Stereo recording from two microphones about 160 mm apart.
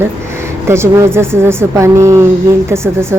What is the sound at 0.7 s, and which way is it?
Speech, 15° right (ahead or behind).